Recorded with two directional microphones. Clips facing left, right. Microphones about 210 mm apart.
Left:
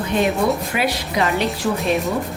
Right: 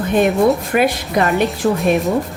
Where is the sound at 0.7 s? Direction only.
50° right (ahead or behind).